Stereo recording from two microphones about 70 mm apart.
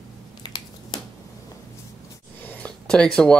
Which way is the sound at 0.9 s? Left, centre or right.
Left.